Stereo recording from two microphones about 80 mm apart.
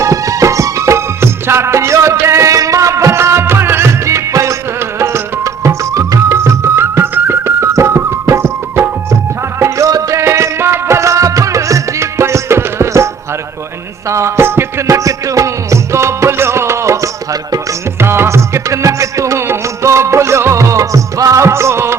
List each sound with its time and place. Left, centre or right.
0.0 s music: right
14.1 s music: right